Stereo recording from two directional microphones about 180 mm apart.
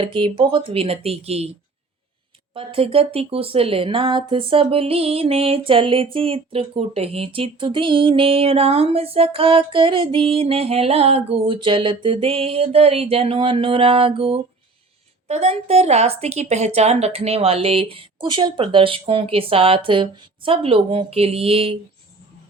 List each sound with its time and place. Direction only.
0.0 s speech: 30° right (ahead or behind)
2.5 s speech: 30° right (ahead or behind)